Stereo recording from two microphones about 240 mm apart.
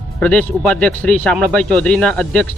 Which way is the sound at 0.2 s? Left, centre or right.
Centre.